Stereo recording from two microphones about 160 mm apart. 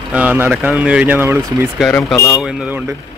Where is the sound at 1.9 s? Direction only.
15° left (ahead or behind).